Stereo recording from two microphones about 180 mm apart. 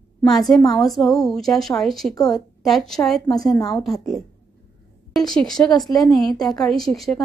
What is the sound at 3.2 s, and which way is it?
Speech, 20° left (ahead or behind).